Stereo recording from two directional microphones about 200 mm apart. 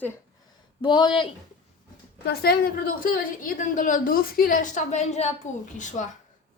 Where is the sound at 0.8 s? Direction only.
25° left (ahead or behind).